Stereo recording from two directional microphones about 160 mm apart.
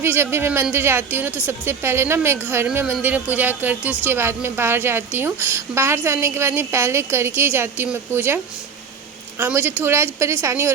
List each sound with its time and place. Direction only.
0.0 s a woman's voice: 15° right (ahead or behind)
9.4 s a woman's voice: 10° right (ahead or behind)